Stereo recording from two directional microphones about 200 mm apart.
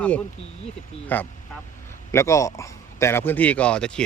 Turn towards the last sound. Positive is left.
turn(degrees=5)  # may be behind; listen again after turning